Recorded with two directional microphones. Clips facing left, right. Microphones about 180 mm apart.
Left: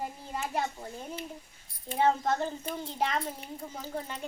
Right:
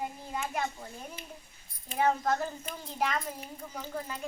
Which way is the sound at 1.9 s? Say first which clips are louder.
Left 1 dB; 30° left (ahead or behind).